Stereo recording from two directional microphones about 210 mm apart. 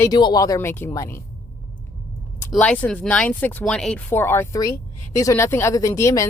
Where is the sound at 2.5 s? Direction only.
5° left (ahead or behind).